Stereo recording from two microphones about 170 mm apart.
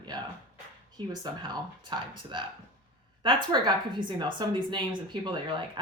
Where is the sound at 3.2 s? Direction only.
30° right (ahead or behind).